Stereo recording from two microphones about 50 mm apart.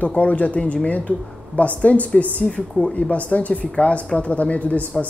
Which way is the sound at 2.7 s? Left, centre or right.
Centre.